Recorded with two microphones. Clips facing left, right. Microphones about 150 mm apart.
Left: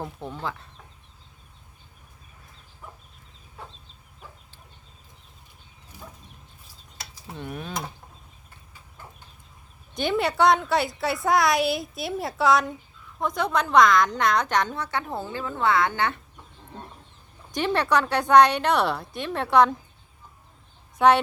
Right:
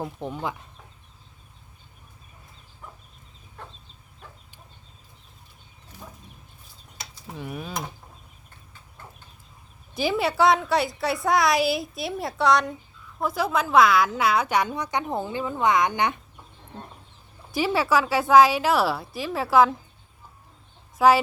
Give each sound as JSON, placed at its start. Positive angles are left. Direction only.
{"t": 0.2, "sound": "a woman's voice", "side_deg": -15}
{"t": 7.3, "sound": "a woman's voice", "side_deg": 0}
{"t": 9.9, "sound": "a woman's voice", "side_deg": -5}
{"t": 17.5, "sound": "a woman's voice", "side_deg": -5}
{"t": 21.0, "sound": "a woman's voice", "side_deg": 0}